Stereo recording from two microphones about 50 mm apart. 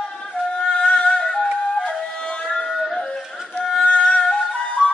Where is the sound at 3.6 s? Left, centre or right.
Centre.